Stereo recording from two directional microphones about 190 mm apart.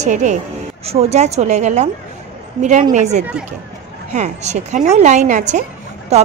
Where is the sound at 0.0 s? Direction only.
40° right (ahead or behind).